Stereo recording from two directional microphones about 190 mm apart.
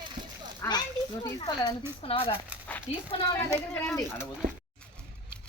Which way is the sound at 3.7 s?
10° left (ahead or behind).